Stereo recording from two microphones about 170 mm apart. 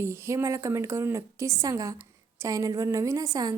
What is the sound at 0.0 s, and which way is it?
A woman's voice, 15° right (ahead or behind).